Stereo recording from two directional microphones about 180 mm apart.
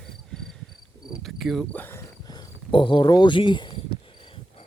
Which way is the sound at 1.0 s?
Centre (ahead or behind).